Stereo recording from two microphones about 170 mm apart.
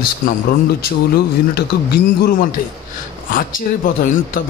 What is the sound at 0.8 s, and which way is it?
A man's voice, 65° left (ahead or behind).